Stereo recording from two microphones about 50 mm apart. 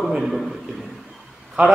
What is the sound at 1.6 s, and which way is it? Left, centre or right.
Speech, right.